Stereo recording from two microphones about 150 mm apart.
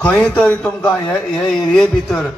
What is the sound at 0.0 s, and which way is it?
A man's voice, 10° left (ahead or behind).